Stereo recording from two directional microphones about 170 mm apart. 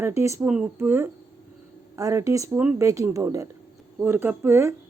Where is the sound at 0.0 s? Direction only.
15° right (ahead or behind).